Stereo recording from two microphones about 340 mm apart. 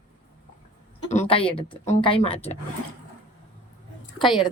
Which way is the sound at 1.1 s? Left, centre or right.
Centre.